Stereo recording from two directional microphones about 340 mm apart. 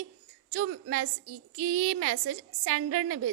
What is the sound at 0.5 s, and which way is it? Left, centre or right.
A woman's voice, right.